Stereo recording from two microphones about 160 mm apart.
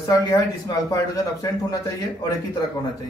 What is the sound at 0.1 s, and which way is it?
Speech, 20° left (ahead or behind).